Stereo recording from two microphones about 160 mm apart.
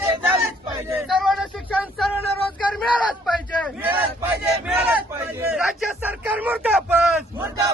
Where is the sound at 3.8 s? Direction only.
10° right (ahead or behind).